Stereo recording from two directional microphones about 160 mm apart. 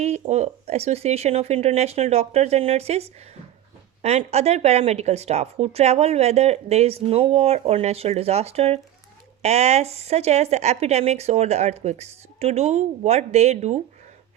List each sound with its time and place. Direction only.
0.0 s speech: 40° right (ahead or behind)